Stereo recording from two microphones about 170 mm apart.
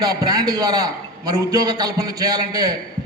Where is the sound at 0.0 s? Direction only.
25° right (ahead or behind).